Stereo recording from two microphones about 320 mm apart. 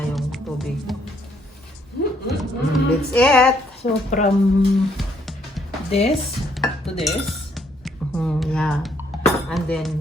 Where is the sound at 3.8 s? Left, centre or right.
Left.